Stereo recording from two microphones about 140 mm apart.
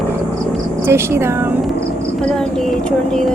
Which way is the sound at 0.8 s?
20° right (ahead or behind).